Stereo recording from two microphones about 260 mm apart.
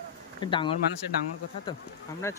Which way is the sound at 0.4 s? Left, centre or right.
Centre.